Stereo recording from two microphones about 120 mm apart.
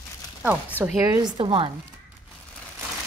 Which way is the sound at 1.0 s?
30° right (ahead or behind).